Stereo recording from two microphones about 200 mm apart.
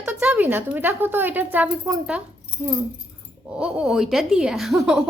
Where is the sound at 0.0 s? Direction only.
5° right (ahead or behind).